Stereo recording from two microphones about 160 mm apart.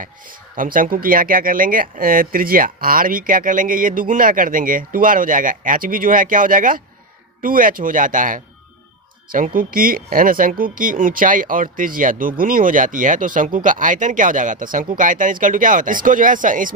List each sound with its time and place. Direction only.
0.0 s speech: 60° right (ahead or behind)